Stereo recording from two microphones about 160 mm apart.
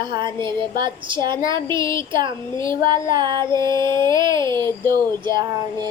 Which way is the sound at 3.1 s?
25° right (ahead or behind).